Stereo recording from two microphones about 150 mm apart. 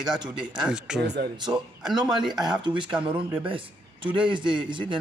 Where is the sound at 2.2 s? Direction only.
5° right (ahead or behind).